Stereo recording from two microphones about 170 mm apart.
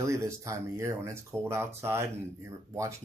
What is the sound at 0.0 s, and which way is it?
Speech, 15° right (ahead or behind).